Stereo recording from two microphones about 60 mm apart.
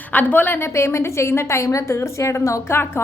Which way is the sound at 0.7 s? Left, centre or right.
Left.